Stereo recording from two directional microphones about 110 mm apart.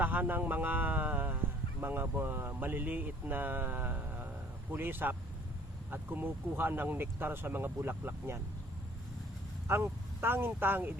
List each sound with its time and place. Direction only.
0.0 s speech: 15° right (ahead or behind)
9.6 s speech: 20° right (ahead or behind)